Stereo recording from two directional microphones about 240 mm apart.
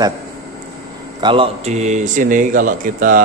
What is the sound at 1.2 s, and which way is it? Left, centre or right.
Speech, right.